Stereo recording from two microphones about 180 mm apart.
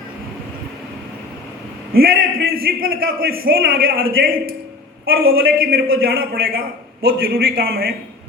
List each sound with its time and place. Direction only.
1.9 s a man's voice: 55° right (ahead or behind)
6.0 s a man's voice: 75° right (ahead or behind); by 7.9 s 60° right (ahead or behind)